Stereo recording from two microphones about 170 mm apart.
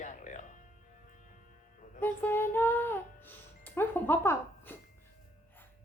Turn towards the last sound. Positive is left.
turn(degrees=10)  # may be behind; listen again after turning